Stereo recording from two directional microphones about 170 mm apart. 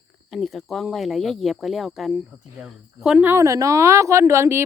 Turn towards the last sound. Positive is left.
turn(degrees=-15)  # may be behind; listen again after turning